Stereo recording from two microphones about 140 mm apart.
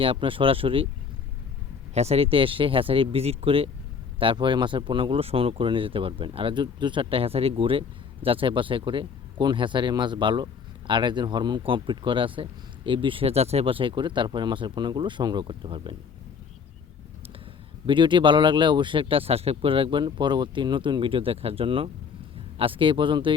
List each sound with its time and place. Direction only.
0.0 s speech: 40° right (ahead or behind)
1.9 s speech: 50° right (ahead or behind)
17.8 s speech: 35° right (ahead or behind)